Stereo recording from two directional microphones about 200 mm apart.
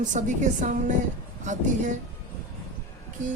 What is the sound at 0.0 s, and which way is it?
Speech, 40° right (ahead or behind).